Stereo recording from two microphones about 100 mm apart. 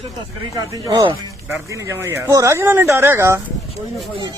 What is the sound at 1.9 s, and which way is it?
Speech, 25° right (ahead or behind).